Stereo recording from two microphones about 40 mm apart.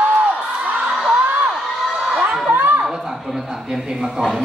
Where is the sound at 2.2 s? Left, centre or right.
Right.